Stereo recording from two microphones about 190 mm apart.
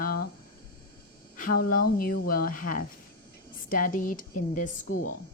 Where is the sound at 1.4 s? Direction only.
50° left (ahead or behind).